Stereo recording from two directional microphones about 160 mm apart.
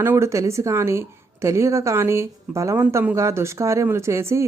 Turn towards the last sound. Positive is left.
turn(degrees=-20)  # may be behind; listen again after turning